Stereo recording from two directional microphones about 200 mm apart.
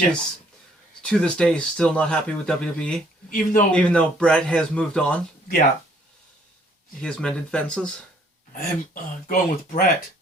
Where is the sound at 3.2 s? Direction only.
45° left (ahead or behind).